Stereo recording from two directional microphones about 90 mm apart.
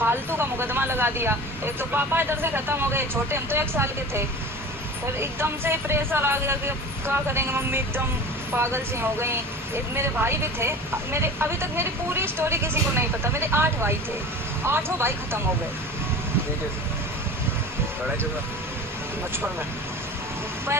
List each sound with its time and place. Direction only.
0.0 s speech: 25° right (ahead or behind)